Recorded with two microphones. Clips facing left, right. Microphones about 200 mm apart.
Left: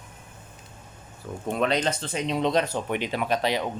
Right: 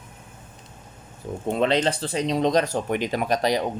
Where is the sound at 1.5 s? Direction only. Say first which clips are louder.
Right 3 dB; 30° right (ahead or behind).